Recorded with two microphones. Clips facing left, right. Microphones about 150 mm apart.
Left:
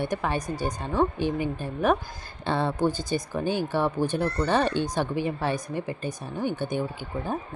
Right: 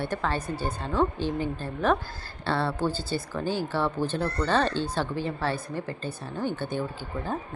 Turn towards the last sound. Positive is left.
turn(degrees=15)  # may be behind; listen again after turning